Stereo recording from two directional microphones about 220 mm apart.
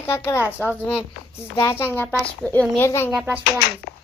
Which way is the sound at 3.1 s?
5° right (ahead or behind).